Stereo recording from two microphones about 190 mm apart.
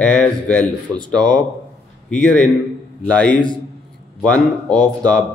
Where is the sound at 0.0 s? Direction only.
5° left (ahead or behind).